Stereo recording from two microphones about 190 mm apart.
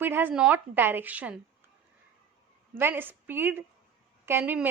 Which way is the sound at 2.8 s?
10° right (ahead or behind).